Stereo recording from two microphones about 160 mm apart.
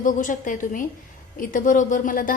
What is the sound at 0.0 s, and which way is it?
A woman's voice, 55° left (ahead or behind).